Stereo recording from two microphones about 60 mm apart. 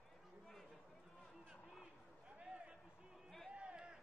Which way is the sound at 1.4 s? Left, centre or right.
Centre.